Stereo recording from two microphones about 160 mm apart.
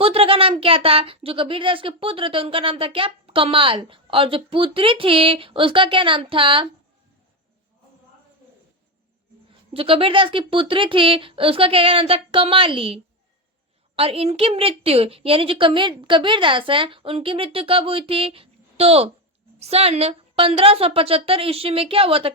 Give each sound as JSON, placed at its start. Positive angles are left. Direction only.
{"t": 0.0, "sound": "speech", "side_deg": -35}
{"t": 9.7, "sound": "speech", "side_deg": -35}